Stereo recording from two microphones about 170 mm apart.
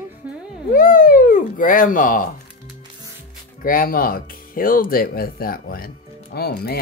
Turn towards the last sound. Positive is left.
turn(degrees=65)  # may be behind; listen again after turning